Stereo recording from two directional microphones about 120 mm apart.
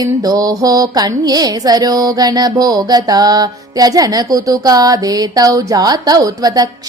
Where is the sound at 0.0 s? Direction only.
30° right (ahead or behind).